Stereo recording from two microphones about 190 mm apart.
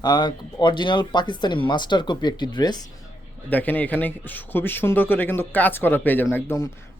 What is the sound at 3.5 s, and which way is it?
A man's voice, 10° left (ahead or behind).